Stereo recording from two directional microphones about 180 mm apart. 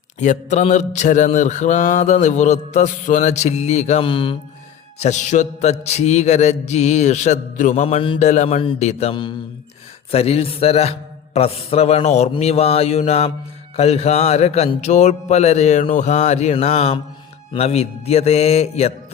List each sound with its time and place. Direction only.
0.2 s mantra: 40° left (ahead or behind)
4.9 s mantra: 40° left (ahead or behind)